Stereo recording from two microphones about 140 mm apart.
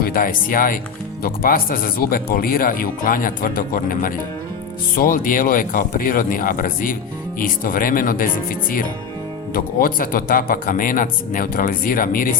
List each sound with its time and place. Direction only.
0.0 s speech: 90° left
4.9 s speech: 80° left